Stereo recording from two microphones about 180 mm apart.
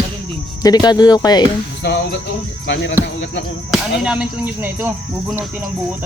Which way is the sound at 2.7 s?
90° left.